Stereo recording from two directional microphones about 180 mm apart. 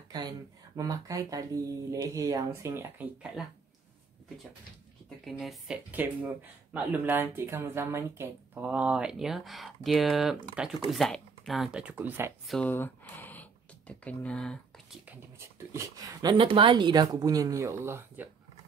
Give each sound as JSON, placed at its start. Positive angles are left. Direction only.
{"t": 0.1, "sound": "speech", "side_deg": -20}
{"t": 5.2, "sound": "speech", "side_deg": 0}
{"t": 12.4, "sound": "a sound", "side_deg": 5}
{"t": 15.0, "sound": "speech", "side_deg": -15}